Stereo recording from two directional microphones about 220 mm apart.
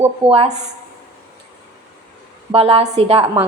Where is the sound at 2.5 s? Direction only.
25° right (ahead or behind).